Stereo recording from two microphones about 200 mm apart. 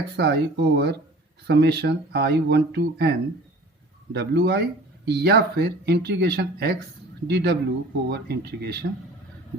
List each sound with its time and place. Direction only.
0.2 s speech: 55° right (ahead or behind)